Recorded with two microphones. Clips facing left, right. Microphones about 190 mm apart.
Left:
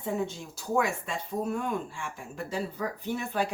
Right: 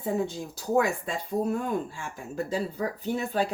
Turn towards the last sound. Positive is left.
turn(degrees=-30)  # may be behind; listen again after turning